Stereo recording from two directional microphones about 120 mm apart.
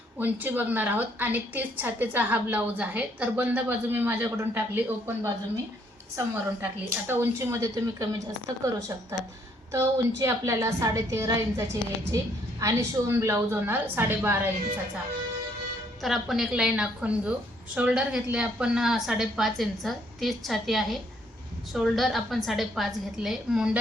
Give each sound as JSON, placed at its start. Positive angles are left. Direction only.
{"t": 0.2, "sound": "a woman's voice", "side_deg": -15}
{"t": 16.0, "sound": "a woman's voice", "side_deg": 0}